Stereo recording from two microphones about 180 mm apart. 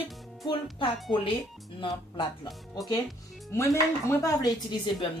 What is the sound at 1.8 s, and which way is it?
Speech, 25° left (ahead or behind).